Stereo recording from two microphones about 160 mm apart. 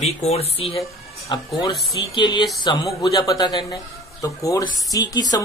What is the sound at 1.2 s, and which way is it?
Speech, 25° left (ahead or behind).